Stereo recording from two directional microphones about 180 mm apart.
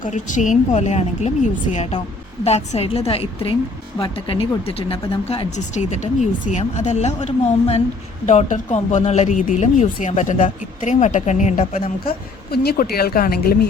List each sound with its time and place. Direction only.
0.0 s speech: 45° left (ahead or behind)
12.0 s a woman's voice: 55° left (ahead or behind)